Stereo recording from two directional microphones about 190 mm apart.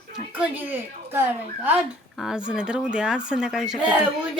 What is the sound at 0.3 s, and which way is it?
Speech, 10° right (ahead or behind).